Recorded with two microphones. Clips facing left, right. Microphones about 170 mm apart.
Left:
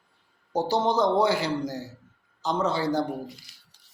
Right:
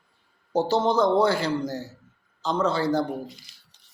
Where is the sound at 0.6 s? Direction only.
15° left (ahead or behind).